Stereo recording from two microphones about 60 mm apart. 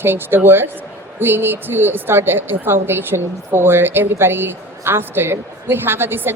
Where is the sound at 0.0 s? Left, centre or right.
Right.